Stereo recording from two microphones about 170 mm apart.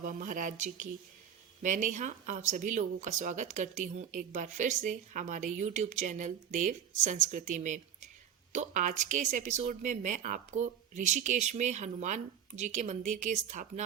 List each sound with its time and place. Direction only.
0.0 s speech: 50° right (ahead or behind)